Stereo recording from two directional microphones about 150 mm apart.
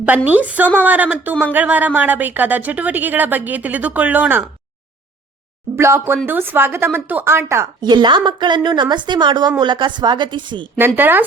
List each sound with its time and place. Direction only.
0.3 s a woman's voice: 10° right (ahead or behind)
5.7 s a woman's voice: 15° right (ahead or behind)
7.8 s a woman's voice: 30° right (ahead or behind)
10.8 s a woman's voice: 15° right (ahead or behind)